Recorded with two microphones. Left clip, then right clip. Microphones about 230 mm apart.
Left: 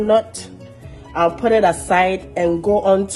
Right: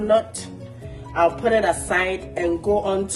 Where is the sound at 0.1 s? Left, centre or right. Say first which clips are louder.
Left 2 dB; left.